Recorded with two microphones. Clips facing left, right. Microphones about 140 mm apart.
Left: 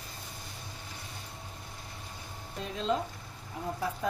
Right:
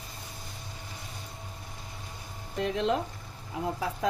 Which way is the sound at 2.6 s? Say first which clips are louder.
Right 4 dB; 75° right (ahead or behind).